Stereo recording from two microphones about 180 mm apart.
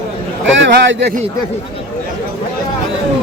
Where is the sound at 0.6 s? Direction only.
90° right.